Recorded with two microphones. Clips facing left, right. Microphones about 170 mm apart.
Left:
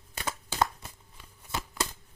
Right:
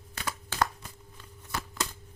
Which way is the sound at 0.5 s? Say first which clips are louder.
Left 1 dB; 25° left (ahead or behind).